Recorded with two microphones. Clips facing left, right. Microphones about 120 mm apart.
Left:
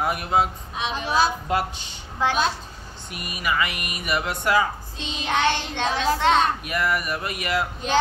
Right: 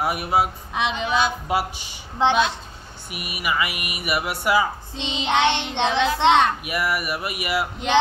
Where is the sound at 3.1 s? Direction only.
10° right (ahead or behind).